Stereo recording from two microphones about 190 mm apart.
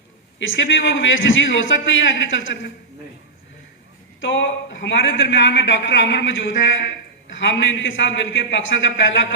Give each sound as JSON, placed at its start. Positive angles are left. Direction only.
{"t": 0.3, "sound": "a man's voice", "side_deg": 85}
{"t": 4.2, "sound": "a man's voice", "side_deg": 75}